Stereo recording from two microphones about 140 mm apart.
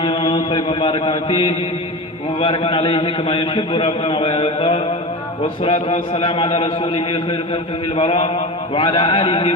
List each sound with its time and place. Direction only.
0.0 s mantra: 35° left (ahead or behind)
2.4 s a man's voice: 40° left (ahead or behind)